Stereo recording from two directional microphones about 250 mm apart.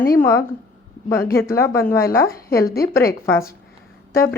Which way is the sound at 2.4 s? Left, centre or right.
Left.